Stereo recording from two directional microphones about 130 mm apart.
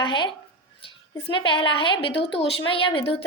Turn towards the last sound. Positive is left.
turn(degrees=45)  # may be behind; listen again after turning